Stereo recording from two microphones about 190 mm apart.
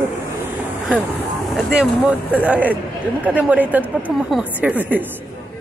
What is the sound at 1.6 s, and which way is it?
Speech, 5° right (ahead or behind).